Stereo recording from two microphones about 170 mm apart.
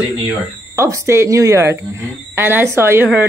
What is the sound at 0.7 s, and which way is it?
A woman's voice, 15° right (ahead or behind).